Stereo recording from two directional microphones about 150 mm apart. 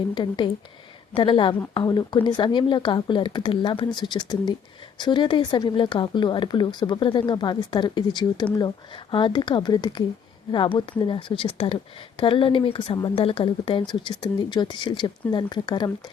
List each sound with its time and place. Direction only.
0.1 s speech: 30° left (ahead or behind)